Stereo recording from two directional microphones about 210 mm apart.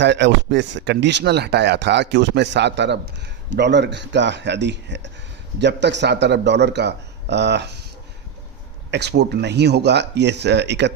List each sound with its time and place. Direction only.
0.0 s speech: 55° right (ahead or behind)
8.9 s speech: 55° right (ahead or behind)